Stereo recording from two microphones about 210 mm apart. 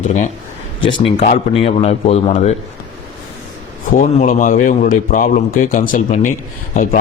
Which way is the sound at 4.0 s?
35° left (ahead or behind).